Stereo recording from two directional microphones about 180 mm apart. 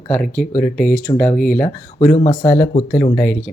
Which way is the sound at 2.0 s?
45° left (ahead or behind).